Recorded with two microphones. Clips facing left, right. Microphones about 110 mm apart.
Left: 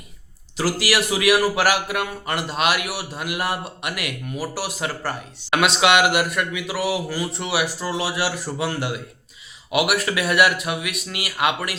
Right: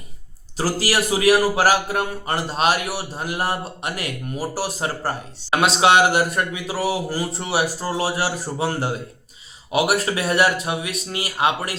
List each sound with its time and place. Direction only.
0.5 s a man's voice: 40° right (ahead or behind)